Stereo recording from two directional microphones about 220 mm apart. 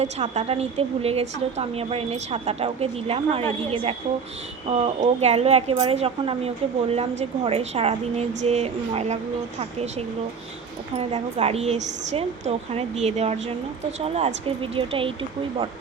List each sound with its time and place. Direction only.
0.0 s speech: 30° right (ahead or behind)
4.7 s speech: 30° right (ahead or behind)
10.9 s speech: 30° right (ahead or behind)